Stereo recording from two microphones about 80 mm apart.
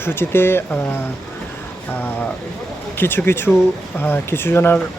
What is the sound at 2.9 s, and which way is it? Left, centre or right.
Speech, left.